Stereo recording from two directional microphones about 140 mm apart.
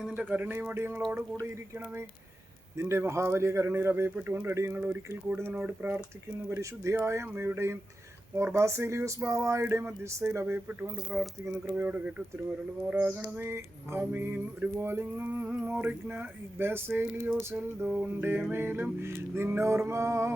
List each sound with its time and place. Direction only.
0.2 s music: 10° right (ahead or behind)
8.4 s speech: 20° right (ahead or behind)
11.1 s speech: centre (ahead or behind)
11.4 s music: 15° right (ahead or behind)